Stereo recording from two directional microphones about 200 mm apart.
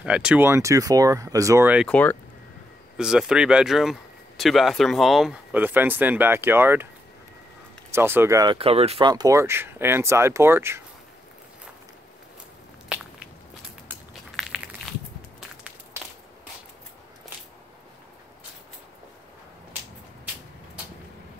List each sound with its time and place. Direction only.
0.0 s speech: 5° right (ahead or behind)
1.9 s speech: 5° left (ahead or behind)
3.0 s speech: 5° right (ahead or behind)
7.9 s speech: 10° right (ahead or behind)
8.5 s speech: 30° right (ahead or behind)
9.1 s speech: 15° right (ahead or behind)
13.8 s a sound: 5° right (ahead or behind)